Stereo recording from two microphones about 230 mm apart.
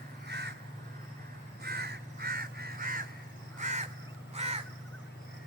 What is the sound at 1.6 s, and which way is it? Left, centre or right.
Crow, right.